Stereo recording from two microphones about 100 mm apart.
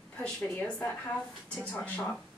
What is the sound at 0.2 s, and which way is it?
A woman's voice, 15° left (ahead or behind).